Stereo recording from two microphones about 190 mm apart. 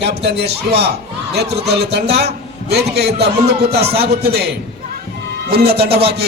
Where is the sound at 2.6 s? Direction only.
60° right (ahead or behind).